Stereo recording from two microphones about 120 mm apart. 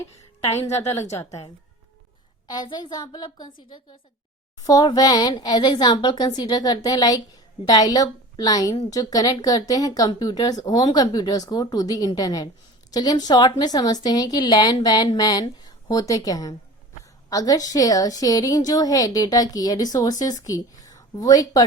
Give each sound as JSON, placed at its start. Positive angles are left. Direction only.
{"t": 0.4, "sound": "a woman's voice", "side_deg": 55}
{"t": 0.7, "sound": "a woman's voice", "side_deg": 25}
{"t": 2.5, "sound": "a woman's voice", "side_deg": 35}